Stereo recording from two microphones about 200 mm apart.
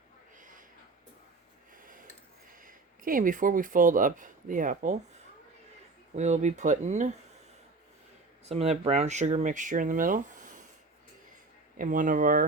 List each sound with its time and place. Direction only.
0.3 s a sound: 40° right (ahead or behind)
2.6 s speech: 45° right (ahead or behind)
6.1 s speech: 35° right (ahead or behind)
8.4 s speech: 30° right (ahead or behind)
11.8 s speech: 40° right (ahead or behind)